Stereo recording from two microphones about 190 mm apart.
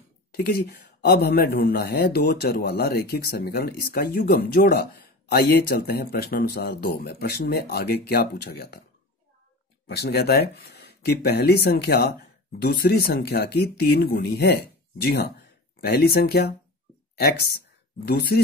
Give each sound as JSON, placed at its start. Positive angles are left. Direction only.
{"t": 0.3, "sound": "speech", "side_deg": 55}
{"t": 9.8, "sound": "speech", "side_deg": 60}